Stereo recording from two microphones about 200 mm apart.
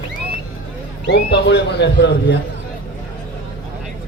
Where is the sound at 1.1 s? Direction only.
55° left (ahead or behind).